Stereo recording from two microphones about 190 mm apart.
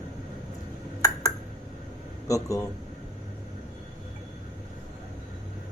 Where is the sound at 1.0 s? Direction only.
15° left (ahead or behind).